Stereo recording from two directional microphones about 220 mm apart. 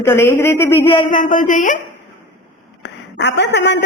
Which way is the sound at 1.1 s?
35° left (ahead or behind).